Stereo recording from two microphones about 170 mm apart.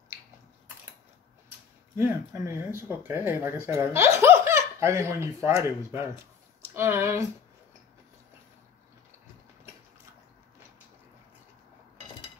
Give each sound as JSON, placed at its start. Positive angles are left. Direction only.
{"t": 2.0, "sound": "speech", "side_deg": -15}